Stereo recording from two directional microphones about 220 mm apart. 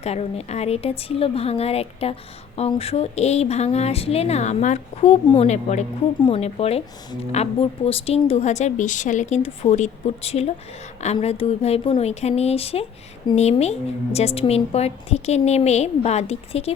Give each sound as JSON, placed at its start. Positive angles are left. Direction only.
{"t": 0.0, "sound": "a woman's voice", "side_deg": 30}